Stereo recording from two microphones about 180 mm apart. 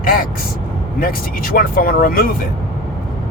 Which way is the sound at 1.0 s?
50° left (ahead or behind).